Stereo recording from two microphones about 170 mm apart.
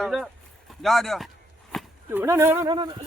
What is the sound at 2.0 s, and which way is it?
Speech, 15° right (ahead or behind).